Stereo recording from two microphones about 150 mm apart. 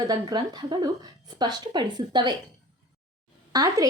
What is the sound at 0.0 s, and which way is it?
A woman's voice, 25° right (ahead or behind).